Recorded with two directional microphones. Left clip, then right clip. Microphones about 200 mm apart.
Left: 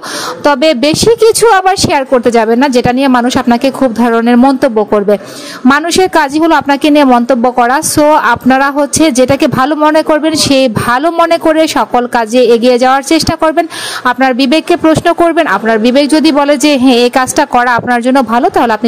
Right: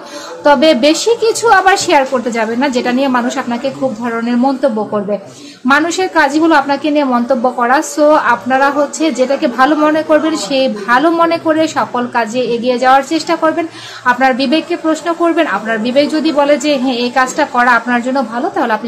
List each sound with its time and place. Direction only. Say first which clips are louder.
0.4 s a woman's voice: even; 45° left (ahead or behind)